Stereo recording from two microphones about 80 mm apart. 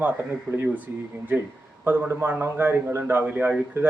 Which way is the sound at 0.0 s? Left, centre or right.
Centre.